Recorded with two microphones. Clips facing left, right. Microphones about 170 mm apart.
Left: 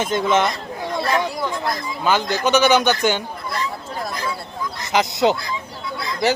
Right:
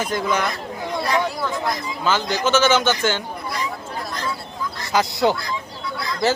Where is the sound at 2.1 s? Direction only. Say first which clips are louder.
Left 2 dB; 15° left (ahead or behind).